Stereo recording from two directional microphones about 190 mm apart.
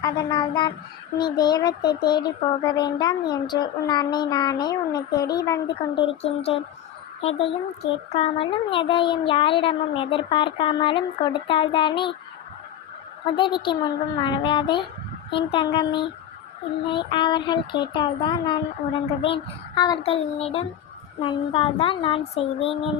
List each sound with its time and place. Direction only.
0.0 s child singing: 25° left (ahead or behind)
7.2 s speech: 30° left (ahead or behind)
8.1 s child singing: 30° left (ahead or behind)
13.3 s child singing: 25° left (ahead or behind)